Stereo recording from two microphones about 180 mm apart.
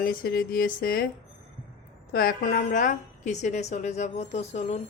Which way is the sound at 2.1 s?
55° left (ahead or behind).